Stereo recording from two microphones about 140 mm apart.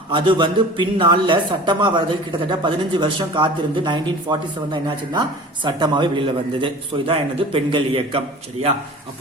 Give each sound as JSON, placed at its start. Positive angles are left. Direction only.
{"t": 0.1, "sound": "a man's voice", "side_deg": -35}